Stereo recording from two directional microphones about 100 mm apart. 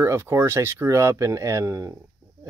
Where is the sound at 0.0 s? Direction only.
25° right (ahead or behind).